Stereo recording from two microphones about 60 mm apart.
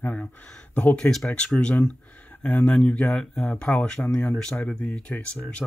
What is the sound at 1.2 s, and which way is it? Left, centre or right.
Speech, centre.